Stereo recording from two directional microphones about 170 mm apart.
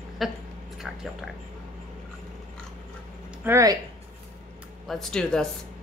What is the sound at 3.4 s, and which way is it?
Speech, 15° right (ahead or behind).